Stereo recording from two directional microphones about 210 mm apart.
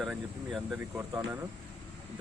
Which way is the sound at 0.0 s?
Centre (ahead or behind).